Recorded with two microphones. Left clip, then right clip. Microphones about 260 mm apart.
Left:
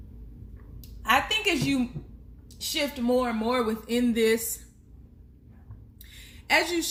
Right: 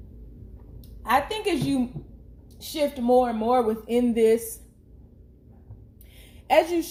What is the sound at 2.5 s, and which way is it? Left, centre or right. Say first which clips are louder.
Speech: right 2 dB; left.